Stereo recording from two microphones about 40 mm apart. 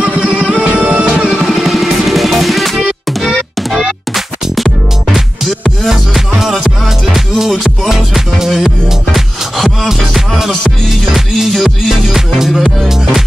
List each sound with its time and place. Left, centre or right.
0.6 s music: right
1.5 s music: centre
3.3 s music: centre
4.6 s music: centre